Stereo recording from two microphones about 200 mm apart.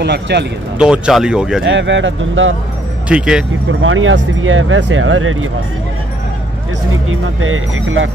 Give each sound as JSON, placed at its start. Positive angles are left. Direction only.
{"t": 0.0, "sound": "speech", "side_deg": -60}
{"t": 0.7, "sound": "speech", "side_deg": -5}
{"t": 1.6, "sound": "speech", "side_deg": -65}
{"t": 3.1, "sound": "speech", "side_deg": -5}
{"t": 3.8, "sound": "speech", "side_deg": -80}
{"t": 7.1, "sound": "speech", "side_deg": -90}